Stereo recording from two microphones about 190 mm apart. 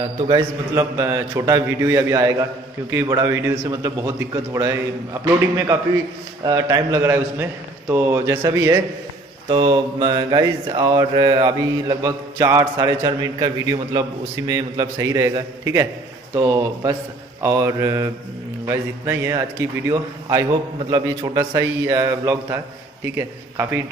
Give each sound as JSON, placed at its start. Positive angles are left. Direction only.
{"t": 0.3, "sound": "a man's voice", "side_deg": -15}
{"t": 6.4, "sound": "a man's voice", "side_deg": -20}
{"t": 9.5, "sound": "mantra", "side_deg": -25}
{"t": 14.5, "sound": "a man's voice", "side_deg": -20}
{"t": 19.9, "sound": "mantra", "side_deg": -20}
{"t": 20.9, "sound": "a man's voice", "side_deg": -20}